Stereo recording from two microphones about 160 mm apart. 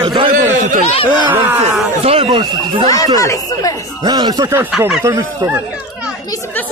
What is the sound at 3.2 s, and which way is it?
Speech, 20° left (ahead or behind).